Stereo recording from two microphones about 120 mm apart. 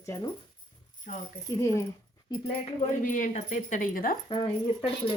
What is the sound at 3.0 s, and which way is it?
Speech, 90° left.